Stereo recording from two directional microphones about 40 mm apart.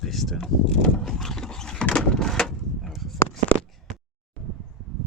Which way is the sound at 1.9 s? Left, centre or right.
Centre.